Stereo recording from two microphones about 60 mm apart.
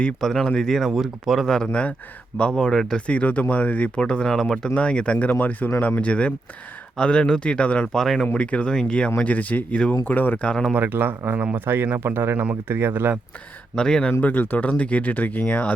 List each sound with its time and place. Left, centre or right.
0.0 s speech: centre
0.9 s speech: centre
1.7 s speech: left
3.1 s speech: left; by 4.7 s centre
4.7 s speech: centre
8.0 s speech: centre
8.3 s speech: left
10.5 s speech: centre
10.8 s speech: right
13.7 s speech: centre
14.2 s speech: left